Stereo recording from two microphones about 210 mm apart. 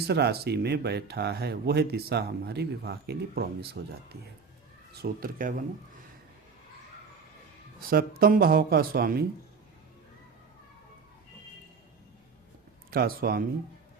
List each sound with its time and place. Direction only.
0.1 s speech: 50° right (ahead or behind)
7.9 s speech: 45° right (ahead or behind)
12.9 s speech: 45° right (ahead or behind)